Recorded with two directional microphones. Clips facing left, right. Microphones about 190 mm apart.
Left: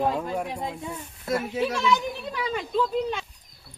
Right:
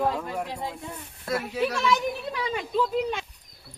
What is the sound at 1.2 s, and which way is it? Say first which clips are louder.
Speech: left 2 dB; centre (ahead or behind).